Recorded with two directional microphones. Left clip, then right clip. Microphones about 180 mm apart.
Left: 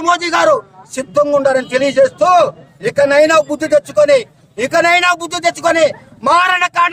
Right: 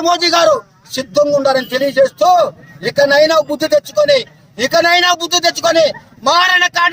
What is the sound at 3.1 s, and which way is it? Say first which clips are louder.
Speech: left 1 dB; 30° left (ahead or behind).